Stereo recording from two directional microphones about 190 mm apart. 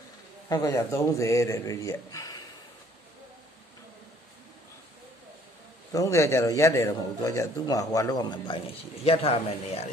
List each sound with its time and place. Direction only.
0.5 s speech: 20° left (ahead or behind)
5.9 s a man's voice: 15° left (ahead or behind); by 9.8 s 30° left (ahead or behind)